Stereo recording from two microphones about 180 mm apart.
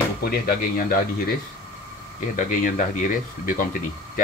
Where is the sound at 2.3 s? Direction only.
45° left (ahead or behind).